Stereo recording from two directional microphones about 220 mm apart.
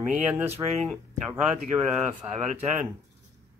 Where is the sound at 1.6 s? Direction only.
35° right (ahead or behind).